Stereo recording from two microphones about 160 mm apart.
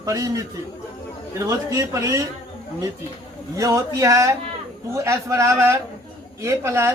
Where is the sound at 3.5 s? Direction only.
20° right (ahead or behind).